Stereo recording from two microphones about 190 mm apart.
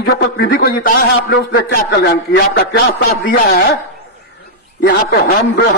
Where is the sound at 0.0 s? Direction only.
55° left (ahead or behind).